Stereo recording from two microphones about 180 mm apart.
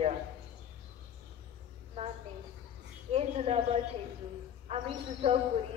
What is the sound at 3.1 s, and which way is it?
A woman's voice, 35° right (ahead or behind).